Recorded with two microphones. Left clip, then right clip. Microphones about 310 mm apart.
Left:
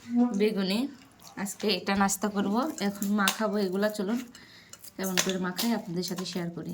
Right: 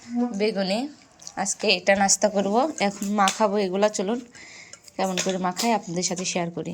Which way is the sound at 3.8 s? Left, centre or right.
Centre.